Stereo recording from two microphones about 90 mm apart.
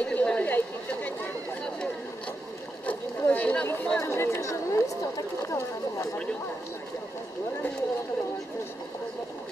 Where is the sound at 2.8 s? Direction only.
20° left (ahead or behind).